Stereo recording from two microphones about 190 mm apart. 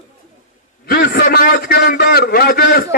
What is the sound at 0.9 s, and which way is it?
A man's voice, 55° left (ahead or behind).